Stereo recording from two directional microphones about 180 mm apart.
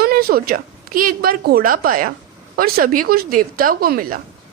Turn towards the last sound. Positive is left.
turn(degrees=-55)  # may be behind; listen again after turning